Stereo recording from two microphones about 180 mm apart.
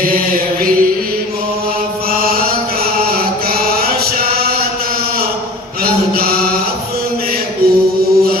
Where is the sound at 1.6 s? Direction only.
55° right (ahead or behind).